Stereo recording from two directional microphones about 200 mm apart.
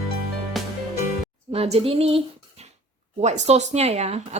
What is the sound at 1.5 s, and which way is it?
Speech, 30° right (ahead or behind).